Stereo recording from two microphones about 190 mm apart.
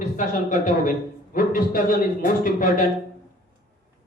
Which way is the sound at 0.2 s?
45° left (ahead or behind).